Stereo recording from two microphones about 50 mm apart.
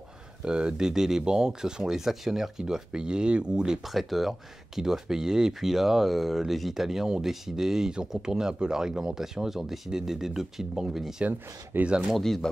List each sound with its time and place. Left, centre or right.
0.5 s speech: centre
3.8 s speech: centre
11.7 s speech: right
12.1 s speech: centre